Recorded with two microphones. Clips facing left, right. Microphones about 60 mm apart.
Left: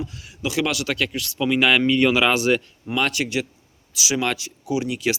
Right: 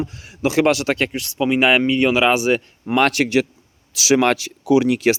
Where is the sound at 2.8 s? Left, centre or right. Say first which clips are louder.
Right 6 dB; right.